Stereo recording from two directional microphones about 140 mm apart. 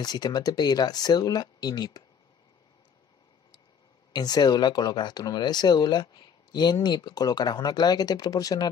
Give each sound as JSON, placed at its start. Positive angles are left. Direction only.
{"t": 0.0, "sound": "speech", "side_deg": 30}
{"t": 4.1, "sound": "speech", "side_deg": 30}